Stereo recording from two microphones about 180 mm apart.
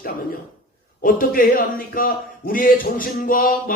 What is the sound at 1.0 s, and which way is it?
Speech, 50° left (ahead or behind).